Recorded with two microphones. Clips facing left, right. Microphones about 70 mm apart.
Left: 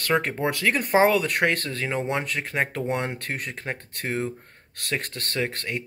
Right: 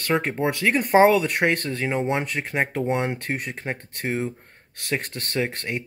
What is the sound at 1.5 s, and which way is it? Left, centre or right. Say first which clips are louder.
Speech: right 2 dB; centre.